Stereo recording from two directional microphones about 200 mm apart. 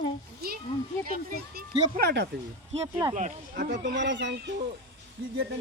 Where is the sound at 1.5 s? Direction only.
50° right (ahead or behind).